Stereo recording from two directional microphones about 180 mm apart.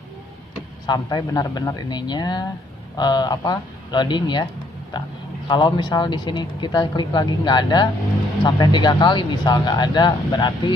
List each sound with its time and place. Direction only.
0.8 s speech: 20° left (ahead or behind)
5.5 s speech: 25° left (ahead or behind)